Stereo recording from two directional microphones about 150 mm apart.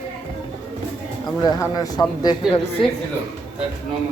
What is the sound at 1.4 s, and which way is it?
Speech, 25° left (ahead or behind).